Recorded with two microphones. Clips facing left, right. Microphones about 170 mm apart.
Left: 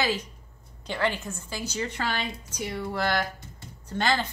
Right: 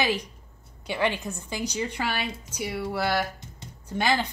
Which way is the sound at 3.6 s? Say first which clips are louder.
Right 1 dB; 10° right (ahead or behind).